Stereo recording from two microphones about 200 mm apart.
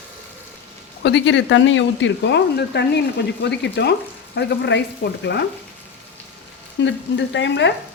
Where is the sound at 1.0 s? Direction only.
65° left (ahead or behind).